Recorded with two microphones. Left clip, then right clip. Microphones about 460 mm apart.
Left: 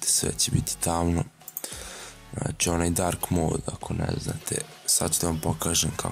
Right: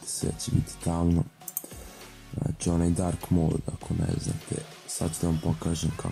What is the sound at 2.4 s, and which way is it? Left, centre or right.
Speech, left.